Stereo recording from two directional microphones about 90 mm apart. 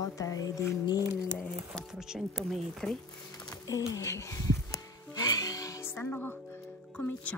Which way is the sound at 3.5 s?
40° left (ahead or behind).